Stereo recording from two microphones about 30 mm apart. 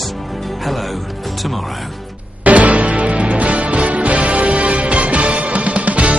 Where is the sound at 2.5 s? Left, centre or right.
Right.